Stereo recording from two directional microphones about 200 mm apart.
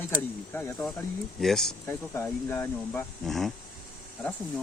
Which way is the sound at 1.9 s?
10° left (ahead or behind).